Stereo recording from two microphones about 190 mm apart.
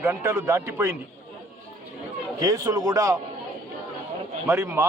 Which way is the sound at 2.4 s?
20° right (ahead or behind).